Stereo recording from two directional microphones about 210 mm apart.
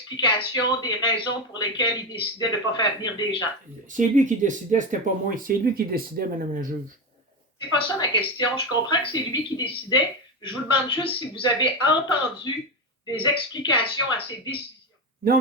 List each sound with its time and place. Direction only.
0.3 s speech: 20° left (ahead or behind)
3.8 s speech: 35° right (ahead or behind)
7.7 s speech: 25° left (ahead or behind)